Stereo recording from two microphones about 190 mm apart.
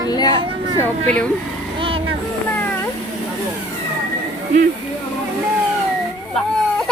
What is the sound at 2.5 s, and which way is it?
Cat, 15° left (ahead or behind).